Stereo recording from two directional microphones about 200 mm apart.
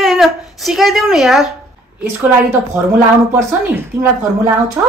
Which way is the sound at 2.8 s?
10° right (ahead or behind).